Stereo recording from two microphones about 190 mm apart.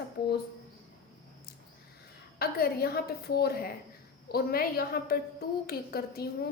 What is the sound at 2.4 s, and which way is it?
A woman's voice, 55° left (ahead or behind).